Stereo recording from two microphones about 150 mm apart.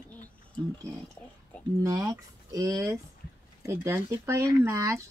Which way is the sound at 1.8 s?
20° right (ahead or behind).